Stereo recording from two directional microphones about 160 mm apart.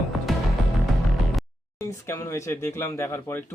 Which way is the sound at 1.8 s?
15° left (ahead or behind).